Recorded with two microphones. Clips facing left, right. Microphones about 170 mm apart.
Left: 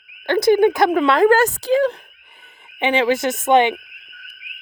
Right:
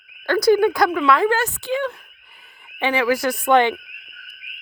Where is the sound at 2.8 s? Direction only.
25° left (ahead or behind).